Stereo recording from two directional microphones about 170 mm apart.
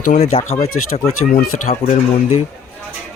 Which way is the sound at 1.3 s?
50° left (ahead or behind).